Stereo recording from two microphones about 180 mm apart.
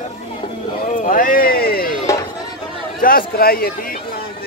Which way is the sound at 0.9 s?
50° left (ahead or behind).